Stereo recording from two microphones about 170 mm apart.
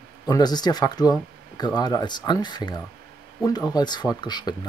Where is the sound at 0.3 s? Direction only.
25° left (ahead or behind).